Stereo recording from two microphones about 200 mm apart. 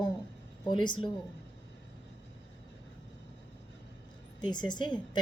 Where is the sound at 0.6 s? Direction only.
25° left (ahead or behind).